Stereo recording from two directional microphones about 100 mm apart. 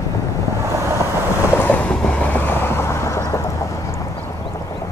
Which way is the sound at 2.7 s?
25° left (ahead or behind).